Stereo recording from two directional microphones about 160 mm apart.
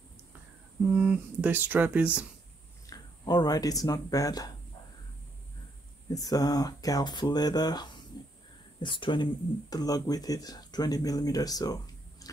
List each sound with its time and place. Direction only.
0.9 s speech: 10° right (ahead or behind)
2.9 s speech: 25° left (ahead or behind)
6.0 s speech: 25° left (ahead or behind)